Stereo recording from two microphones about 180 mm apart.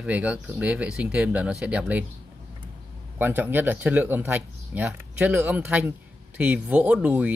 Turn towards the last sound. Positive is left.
turn(degrees=-10)  # may be behind; listen again after turning